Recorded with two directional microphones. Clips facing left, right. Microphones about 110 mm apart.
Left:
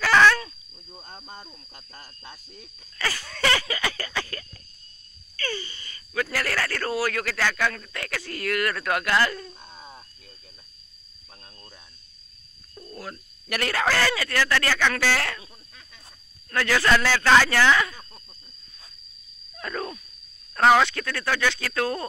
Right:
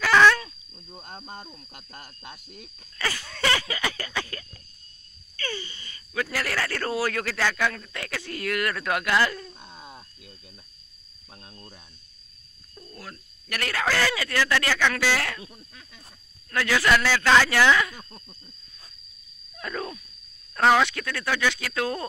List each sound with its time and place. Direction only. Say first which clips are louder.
0.0 s dog: even; 5° right (ahead or behind)
0.8 s wild animals: right 2 dB; 10° right (ahead or behind)
1.5 s speech: right 3 dB; 10° right (ahead or behind)
5.3 s a sound: left 2 dB; 20° right (ahead or behind)
6.3 s speech: right 1 dB; 15° right (ahead or behind)
11.3 s speech: right 3 dB; 10° right (ahead or behind)
12.7 s a sound: left 5 dB; 10° left (ahead or behind)
13.5 s speech: left 2 dB; 5° left (ahead or behind)
19.6 s a sound: left 1 dB; 10° right (ahead or behind)
20.5 s speech: left 2 dB; 5° left (ahead or behind)
20.8 s speech: left 1 dB; 10° right (ahead or behind)